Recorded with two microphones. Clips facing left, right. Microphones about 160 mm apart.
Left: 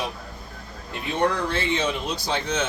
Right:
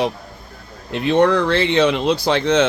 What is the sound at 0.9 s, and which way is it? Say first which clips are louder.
Speech: right 9 dB; 90° right.